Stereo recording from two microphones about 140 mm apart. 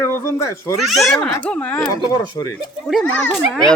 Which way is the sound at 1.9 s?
25° left (ahead or behind).